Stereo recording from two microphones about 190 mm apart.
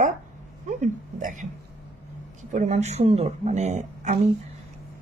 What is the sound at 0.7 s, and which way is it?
Speech, 40° right (ahead or behind).